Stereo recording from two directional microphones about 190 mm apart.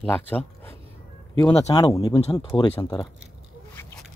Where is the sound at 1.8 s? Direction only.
20° left (ahead or behind).